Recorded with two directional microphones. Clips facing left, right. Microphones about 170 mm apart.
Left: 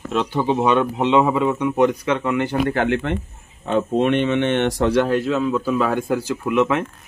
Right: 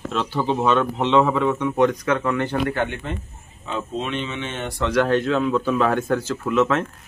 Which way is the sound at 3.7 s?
60° left (ahead or behind).